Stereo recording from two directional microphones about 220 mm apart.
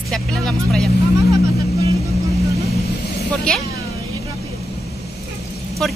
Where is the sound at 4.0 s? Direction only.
15° right (ahead or behind).